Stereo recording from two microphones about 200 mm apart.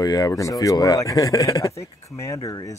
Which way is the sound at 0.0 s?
20° left (ahead or behind).